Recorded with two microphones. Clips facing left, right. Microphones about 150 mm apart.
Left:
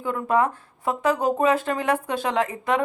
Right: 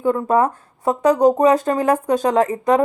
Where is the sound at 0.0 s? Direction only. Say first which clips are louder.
Right 5 dB; 35° right (ahead or behind).